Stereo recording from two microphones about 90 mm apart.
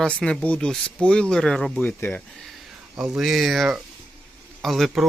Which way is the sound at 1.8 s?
20° left (ahead or behind).